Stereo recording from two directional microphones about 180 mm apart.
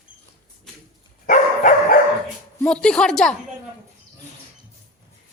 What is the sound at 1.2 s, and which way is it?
Dog, 45° left (ahead or behind).